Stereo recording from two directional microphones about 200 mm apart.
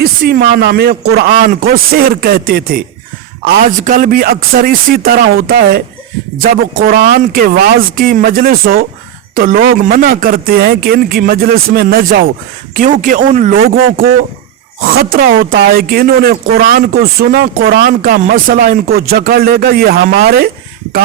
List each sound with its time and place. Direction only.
0.0 s speech: 50° right (ahead or behind)